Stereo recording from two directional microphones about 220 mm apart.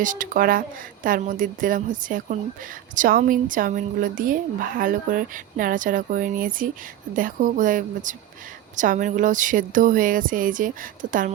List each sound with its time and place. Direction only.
0.0 s a woman's voice: 35° right (ahead or behind)